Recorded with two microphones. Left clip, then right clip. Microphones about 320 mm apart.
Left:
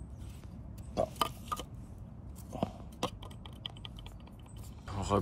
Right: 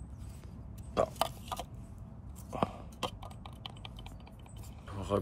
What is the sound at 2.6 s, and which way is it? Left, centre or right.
Computer keyboard, centre.